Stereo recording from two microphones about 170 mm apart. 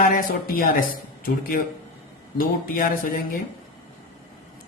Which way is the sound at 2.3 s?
55° left (ahead or behind).